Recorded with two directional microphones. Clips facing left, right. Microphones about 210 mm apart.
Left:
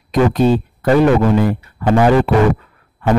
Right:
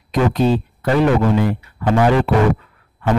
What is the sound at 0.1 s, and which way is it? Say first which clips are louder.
A man's voice: left 3 dB; 45° left (ahead or behind).